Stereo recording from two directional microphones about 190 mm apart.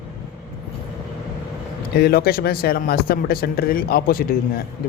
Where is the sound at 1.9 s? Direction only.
55° left (ahead or behind).